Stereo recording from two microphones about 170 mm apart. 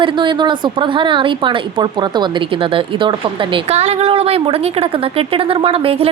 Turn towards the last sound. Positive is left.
turn(degrees=-35)  # may be behind; listen again after turning